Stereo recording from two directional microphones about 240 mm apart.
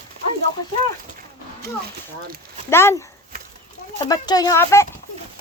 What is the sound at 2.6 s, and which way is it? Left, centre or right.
Speech, centre.